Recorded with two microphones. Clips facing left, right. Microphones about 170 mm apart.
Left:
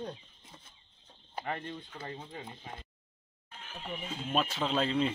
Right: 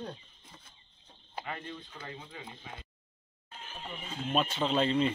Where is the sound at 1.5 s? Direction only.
35° left (ahead or behind).